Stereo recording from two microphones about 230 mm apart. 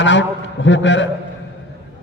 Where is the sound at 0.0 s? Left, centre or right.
Left.